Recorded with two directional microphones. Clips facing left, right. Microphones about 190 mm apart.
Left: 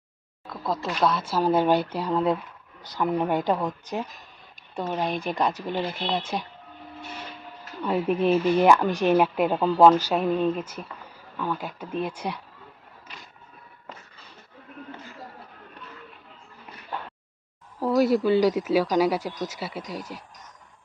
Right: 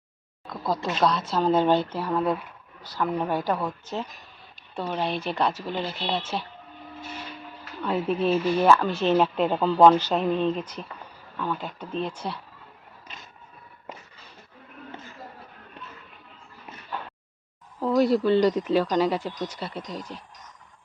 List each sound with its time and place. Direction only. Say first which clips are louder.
0.4 s speech: right 1 dB; centre (ahead or behind)
7.9 s speech: left 2 dB; 15° left (ahead or behind)
17.7 s speech: even; 10° left (ahead or behind)